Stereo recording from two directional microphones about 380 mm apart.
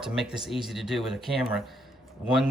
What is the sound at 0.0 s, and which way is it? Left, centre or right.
Speech, centre.